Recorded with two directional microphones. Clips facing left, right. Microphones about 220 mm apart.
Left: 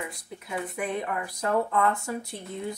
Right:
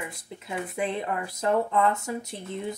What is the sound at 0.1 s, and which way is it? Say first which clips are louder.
Speech: even; 25° right (ahead or behind).